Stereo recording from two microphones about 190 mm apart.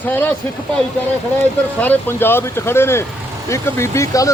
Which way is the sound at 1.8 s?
10° left (ahead or behind).